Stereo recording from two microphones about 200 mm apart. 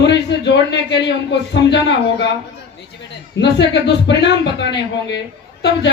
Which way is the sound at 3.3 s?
60° left (ahead or behind).